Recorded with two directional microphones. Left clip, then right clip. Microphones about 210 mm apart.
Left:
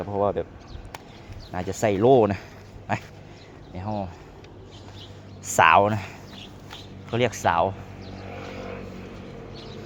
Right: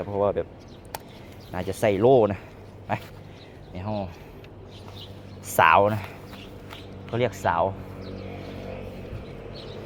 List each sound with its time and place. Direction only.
0.0 s speech: 15° left (ahead or behind)
1.5 s speech: 15° left (ahead or behind)
3.8 s speech: 5° left (ahead or behind)
5.5 s speech: 15° left (ahead or behind)